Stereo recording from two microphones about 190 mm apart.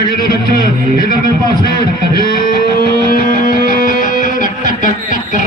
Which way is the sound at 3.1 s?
50° left (ahead or behind).